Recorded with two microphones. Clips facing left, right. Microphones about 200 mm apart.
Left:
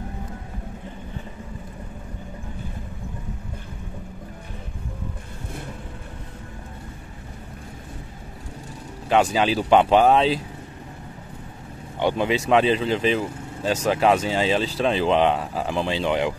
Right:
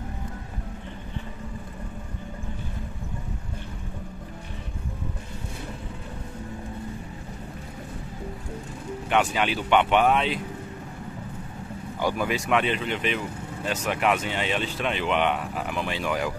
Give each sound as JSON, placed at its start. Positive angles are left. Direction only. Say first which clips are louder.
{"t": 9.1, "sound": "speech", "louder": "left 5 dB", "side_deg": 35}
{"t": 12.0, "sound": "speech", "louder": "left 4 dB", "side_deg": 25}